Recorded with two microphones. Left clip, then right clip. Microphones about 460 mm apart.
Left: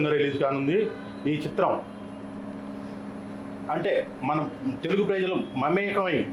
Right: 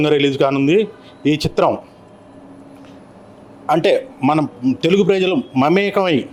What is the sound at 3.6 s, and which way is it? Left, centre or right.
Speech, right.